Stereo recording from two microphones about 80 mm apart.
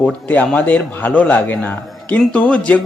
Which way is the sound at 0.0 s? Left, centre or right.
Centre.